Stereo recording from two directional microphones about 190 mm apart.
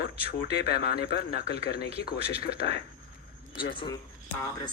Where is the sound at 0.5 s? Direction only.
55° left (ahead or behind).